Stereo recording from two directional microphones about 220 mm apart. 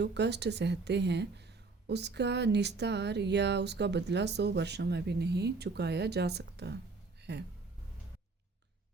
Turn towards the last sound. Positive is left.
turn(degrees=-50)  # may be behind; listen again after turning